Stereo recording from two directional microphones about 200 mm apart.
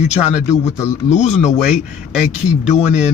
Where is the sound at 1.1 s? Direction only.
35° left (ahead or behind).